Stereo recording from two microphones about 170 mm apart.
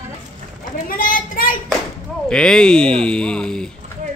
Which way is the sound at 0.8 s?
55° left (ahead or behind).